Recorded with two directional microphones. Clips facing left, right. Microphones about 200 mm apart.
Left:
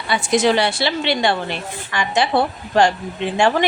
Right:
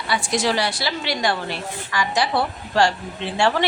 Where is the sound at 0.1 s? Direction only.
20° left (ahead or behind).